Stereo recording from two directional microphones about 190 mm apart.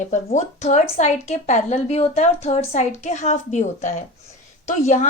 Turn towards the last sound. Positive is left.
turn(degrees=40)  # may be behind; listen again after turning